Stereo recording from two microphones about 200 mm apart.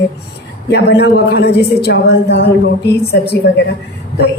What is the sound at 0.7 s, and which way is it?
A woman's voice, 55° left (ahead or behind).